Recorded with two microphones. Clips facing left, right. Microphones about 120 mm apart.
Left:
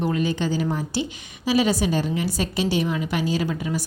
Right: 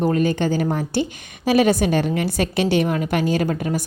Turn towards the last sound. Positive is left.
turn(degrees=-55)  # may be behind; listen again after turning